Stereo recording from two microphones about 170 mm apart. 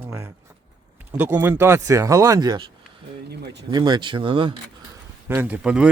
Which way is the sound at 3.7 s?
25° right (ahead or behind).